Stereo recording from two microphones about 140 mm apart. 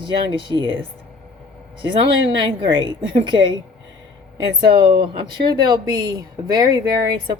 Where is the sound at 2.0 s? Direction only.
35° right (ahead or behind).